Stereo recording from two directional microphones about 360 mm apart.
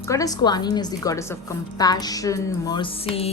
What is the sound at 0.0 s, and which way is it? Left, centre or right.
A woman's voice, centre.